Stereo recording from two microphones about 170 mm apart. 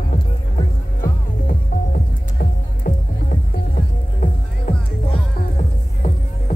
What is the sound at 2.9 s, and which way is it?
Music, 55° left (ahead or behind).